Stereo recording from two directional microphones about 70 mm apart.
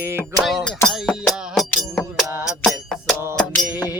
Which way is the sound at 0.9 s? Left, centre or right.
Centre.